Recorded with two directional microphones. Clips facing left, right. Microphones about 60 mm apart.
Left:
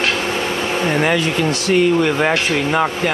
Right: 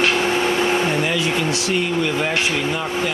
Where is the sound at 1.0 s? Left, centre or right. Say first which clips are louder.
Left 4 dB; left.